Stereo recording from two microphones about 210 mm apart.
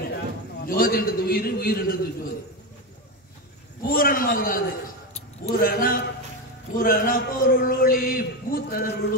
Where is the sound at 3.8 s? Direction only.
40° left (ahead or behind).